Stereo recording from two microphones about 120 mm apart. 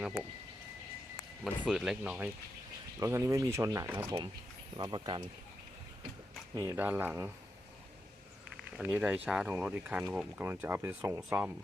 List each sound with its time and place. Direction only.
0.0 s speech: 5° right (ahead or behind)
1.6 s speech: 5° right (ahead or behind)
3.0 s speech: 25° right (ahead or behind); by 5.2 s 40° right (ahead or behind)
6.5 s speech: 30° right (ahead or behind)
6.7 s speech: 15° right (ahead or behind)
8.8 s speech: 10° right (ahead or behind)